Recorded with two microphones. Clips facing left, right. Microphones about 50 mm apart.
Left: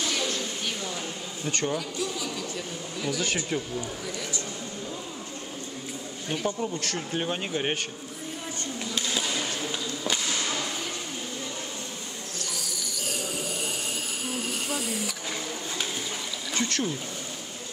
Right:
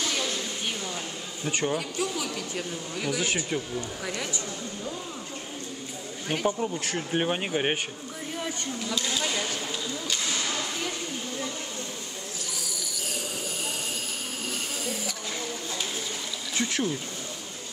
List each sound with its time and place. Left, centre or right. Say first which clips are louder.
1.4 s a man's voice: right 1 dB; centre
1.7 s a woman's voice: right 1 dB; right
3.1 s speech: even; centre
6.6 s speech: right 1 dB; centre
12.4 s cricket: left 2 dB; centre
14.5 s a sound: left 2 dB; centre
16.5 s a sound: even; centre